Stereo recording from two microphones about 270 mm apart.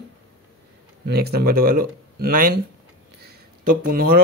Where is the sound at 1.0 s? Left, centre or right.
Right.